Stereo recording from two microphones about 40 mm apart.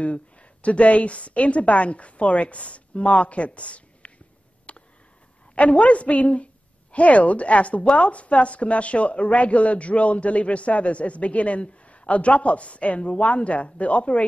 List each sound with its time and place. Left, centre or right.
0.0 s speech: left
4.7 s a sound: left
5.5 s a woman's voice: left